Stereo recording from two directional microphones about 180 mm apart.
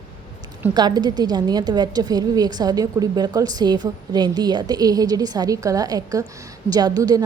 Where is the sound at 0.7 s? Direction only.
25° right (ahead or behind).